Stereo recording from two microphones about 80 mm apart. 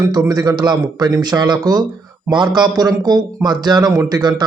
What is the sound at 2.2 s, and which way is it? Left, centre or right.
A man's voice, right.